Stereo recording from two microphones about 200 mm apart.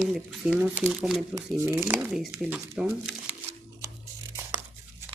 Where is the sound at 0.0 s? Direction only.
5° right (ahead or behind).